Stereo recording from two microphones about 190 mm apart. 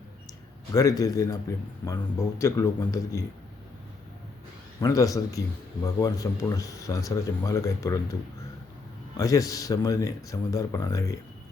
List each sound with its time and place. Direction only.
0.7 s speech: 20° left (ahead or behind)
4.8 s speech: 15° left (ahead or behind)
9.1 s speech: 15° left (ahead or behind)